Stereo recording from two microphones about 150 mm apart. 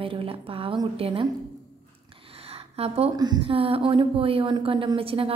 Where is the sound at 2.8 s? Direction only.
40° right (ahead or behind).